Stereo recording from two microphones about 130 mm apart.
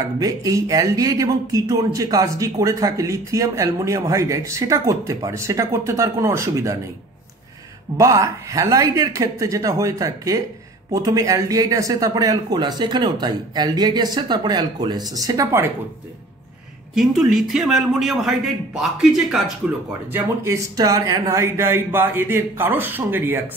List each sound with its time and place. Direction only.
0.2 s speech: 30° right (ahead or behind)
8.0 s speech: 25° right (ahead or behind)
16.9 s a man's voice: 5° right (ahead or behind)
20.1 s speech: 20° right (ahead or behind)